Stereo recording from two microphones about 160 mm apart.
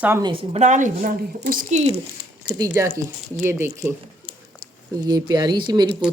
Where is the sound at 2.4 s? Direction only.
20° right (ahead or behind).